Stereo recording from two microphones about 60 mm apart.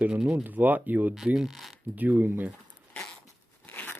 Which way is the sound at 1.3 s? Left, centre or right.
Centre.